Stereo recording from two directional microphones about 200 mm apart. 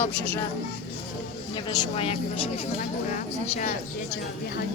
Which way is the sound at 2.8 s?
40° left (ahead or behind).